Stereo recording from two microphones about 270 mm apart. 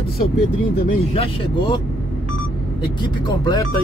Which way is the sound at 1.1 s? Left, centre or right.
Centre.